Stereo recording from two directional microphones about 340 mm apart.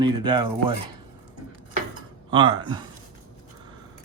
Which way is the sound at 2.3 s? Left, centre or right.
Centre.